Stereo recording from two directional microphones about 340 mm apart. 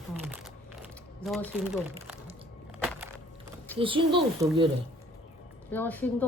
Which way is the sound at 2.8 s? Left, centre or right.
Centre.